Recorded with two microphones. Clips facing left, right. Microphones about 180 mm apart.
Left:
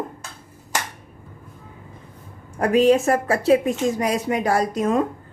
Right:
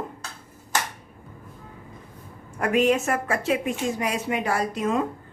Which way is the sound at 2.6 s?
35° left (ahead or behind).